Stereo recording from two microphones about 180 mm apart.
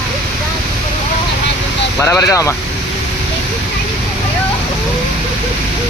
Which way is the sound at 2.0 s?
15° left (ahead or behind).